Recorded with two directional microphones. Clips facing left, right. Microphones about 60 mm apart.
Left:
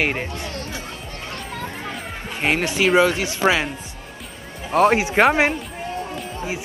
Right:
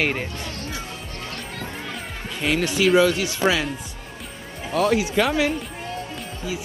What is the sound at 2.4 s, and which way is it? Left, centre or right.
Speech, left.